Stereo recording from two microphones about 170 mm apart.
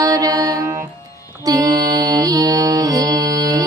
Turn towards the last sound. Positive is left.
turn(degrees=-20)  # may be behind; listen again after turning